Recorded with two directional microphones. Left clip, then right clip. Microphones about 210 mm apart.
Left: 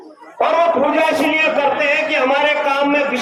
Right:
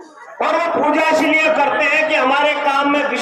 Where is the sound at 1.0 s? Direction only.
55° right (ahead or behind).